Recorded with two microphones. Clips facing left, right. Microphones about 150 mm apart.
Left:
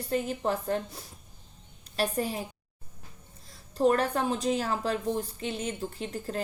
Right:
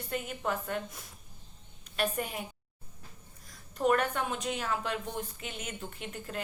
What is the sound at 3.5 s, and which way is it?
A woman's voice, 30° left (ahead or behind).